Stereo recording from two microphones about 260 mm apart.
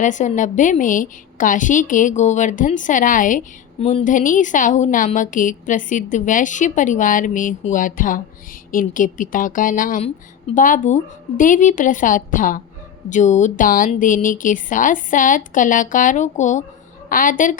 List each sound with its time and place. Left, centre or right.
0.0 s a woman's voice: left